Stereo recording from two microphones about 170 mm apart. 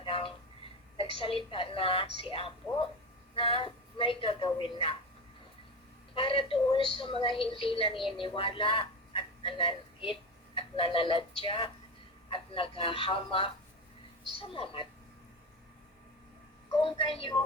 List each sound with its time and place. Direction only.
0.0 s a sound: 30° left (ahead or behind)
1.5 s a woman's voice: 30° left (ahead or behind)
6.1 s speech: 30° left (ahead or behind)
16.8 s speech: 30° left (ahead or behind)